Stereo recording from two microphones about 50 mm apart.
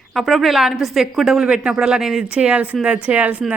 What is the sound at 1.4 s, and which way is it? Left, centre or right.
Speech, centre.